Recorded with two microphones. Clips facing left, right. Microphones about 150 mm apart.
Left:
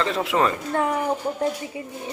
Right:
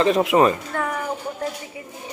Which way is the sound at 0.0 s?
20° right (ahead or behind).